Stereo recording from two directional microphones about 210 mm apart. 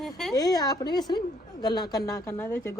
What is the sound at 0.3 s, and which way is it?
A woman's voice, 20° left (ahead or behind).